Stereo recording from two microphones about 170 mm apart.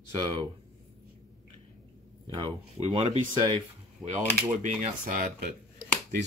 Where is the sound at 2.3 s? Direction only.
30° right (ahead or behind).